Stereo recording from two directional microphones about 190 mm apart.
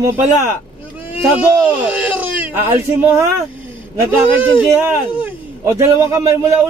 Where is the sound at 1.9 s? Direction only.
10° right (ahead or behind).